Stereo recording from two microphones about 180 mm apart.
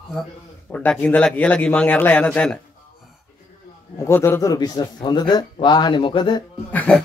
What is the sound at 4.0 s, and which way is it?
A man's voice, 15° left (ahead or behind).